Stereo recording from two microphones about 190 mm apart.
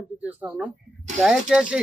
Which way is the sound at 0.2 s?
10° right (ahead or behind).